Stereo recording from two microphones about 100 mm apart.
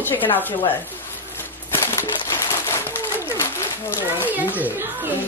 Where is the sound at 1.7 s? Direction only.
25° left (ahead or behind).